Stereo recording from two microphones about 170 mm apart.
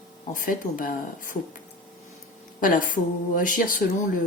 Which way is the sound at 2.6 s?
55° left (ahead or behind).